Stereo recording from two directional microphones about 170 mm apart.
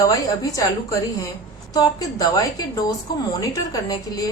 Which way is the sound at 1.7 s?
20° left (ahead or behind).